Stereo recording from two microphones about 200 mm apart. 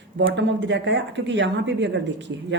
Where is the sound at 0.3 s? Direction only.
60° right (ahead or behind).